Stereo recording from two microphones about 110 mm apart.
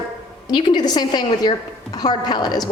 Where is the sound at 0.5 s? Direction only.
40° left (ahead or behind).